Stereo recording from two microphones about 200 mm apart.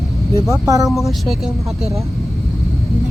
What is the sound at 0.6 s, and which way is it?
Speech, 15° right (ahead or behind).